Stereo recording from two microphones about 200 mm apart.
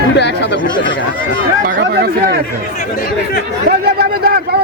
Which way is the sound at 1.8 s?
50° right (ahead or behind).